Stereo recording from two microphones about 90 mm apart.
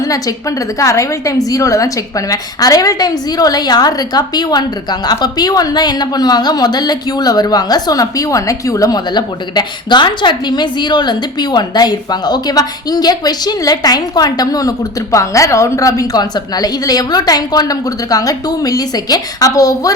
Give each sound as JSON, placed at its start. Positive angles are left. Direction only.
{"t": 0.0, "sound": "a woman's voice", "side_deg": 40}
{"t": 9.1, "sound": "a woman's voice", "side_deg": 55}